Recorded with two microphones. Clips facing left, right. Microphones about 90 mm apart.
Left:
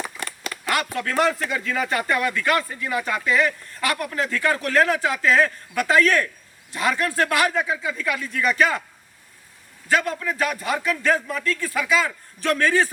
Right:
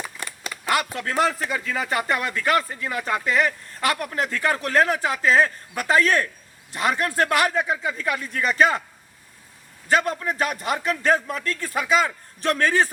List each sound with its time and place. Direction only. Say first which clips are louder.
0.7 s a man's voice: even; 25° right (ahead or behind)
9.9 s speech: right 1 dB; 35° right (ahead or behind)